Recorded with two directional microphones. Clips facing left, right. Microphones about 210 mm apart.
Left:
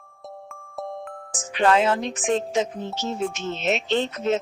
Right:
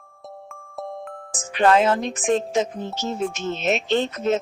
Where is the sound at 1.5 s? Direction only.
45° right (ahead or behind).